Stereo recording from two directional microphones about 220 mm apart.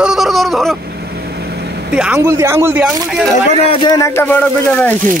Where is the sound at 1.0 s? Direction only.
45° right (ahead or behind).